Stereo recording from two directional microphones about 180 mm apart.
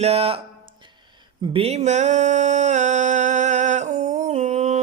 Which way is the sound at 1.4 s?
30° right (ahead or behind).